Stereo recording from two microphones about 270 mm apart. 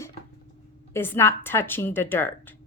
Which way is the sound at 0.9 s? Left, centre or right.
Centre.